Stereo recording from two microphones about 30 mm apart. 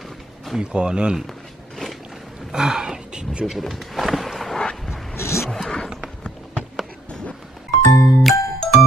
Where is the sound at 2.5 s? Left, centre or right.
Right.